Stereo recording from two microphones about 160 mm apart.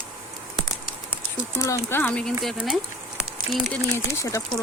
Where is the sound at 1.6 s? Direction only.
20° left (ahead or behind); by 2.8 s centre (ahead or behind).